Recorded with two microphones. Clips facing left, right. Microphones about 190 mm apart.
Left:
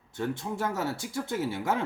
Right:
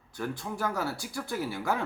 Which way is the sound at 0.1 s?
20° left (ahead or behind).